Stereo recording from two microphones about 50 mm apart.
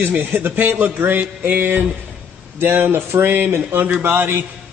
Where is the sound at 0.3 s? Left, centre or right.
Right.